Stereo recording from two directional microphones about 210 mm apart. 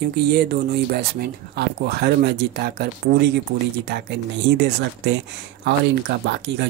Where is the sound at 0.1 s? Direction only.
50° right (ahead or behind).